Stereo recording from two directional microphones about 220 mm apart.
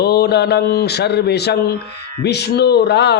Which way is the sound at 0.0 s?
50° left (ahead or behind).